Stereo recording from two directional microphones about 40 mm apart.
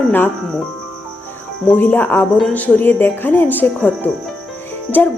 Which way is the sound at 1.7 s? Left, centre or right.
Left.